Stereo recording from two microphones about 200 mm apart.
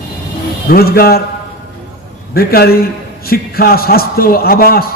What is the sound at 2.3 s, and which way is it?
A man's voice, 50° left (ahead or behind).